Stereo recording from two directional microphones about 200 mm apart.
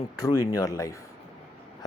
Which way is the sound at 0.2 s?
20° left (ahead or behind).